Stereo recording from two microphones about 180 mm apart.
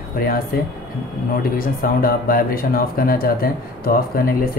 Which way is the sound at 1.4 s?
50° left (ahead or behind).